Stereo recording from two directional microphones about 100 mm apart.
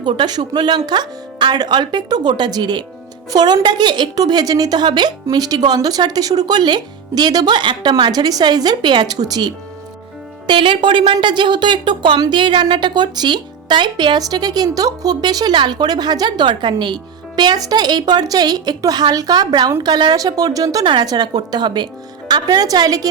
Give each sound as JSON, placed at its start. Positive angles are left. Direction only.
{"t": 0.0, "sound": "speech", "side_deg": -45}
{"t": 10.4, "sound": "a woman's voice", "side_deg": -55}